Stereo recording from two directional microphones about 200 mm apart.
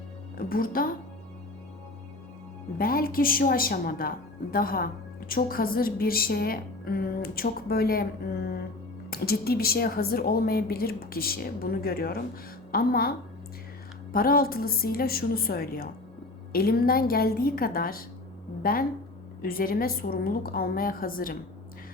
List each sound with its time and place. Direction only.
0.3 s a woman's voice: 45° left (ahead or behind)
2.7 s a woman's voice: 45° left (ahead or behind)